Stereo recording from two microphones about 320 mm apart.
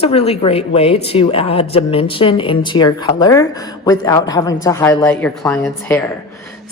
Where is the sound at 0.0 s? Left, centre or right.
Centre.